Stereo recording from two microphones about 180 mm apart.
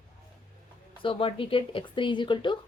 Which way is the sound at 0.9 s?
30° left (ahead or behind).